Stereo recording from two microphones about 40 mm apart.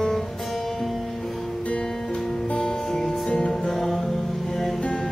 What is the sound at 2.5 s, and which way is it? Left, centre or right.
Music, left.